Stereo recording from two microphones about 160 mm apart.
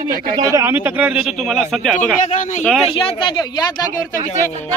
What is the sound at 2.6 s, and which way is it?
Speech, 5° left (ahead or behind).